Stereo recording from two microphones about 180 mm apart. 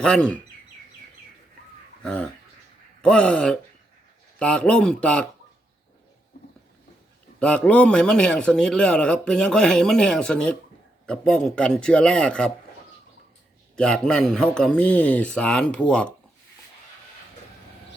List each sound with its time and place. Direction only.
0.0 s a man's voice: 5° left (ahead or behind)
2.0 s a man's voice: 5° left (ahead or behind)
7.3 s a man's voice: 5° left (ahead or behind)
13.7 s a man's voice: 5° left (ahead or behind)